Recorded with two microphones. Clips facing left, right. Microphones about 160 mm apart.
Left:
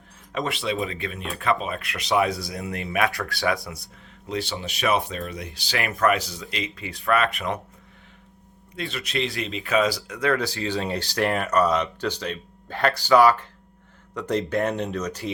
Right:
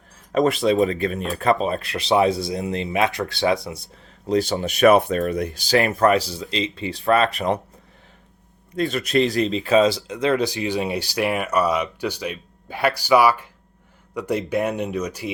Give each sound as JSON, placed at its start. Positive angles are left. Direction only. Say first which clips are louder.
{"t": 0.3, "sound": "speech", "louder": "right 9 dB", "side_deg": -40}
{"t": 4.3, "sound": "speech", "louder": "right 9 dB", "side_deg": -40}
{"t": 8.7, "sound": "speech", "louder": "right 9 dB", "side_deg": -45}